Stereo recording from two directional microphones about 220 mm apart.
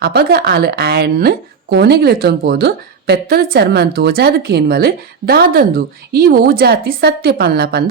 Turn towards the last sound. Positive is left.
turn(degrees=-45)  # may be behind; listen again after turning